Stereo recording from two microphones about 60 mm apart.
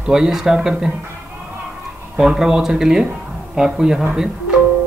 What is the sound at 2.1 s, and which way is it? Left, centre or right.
Speech, centre.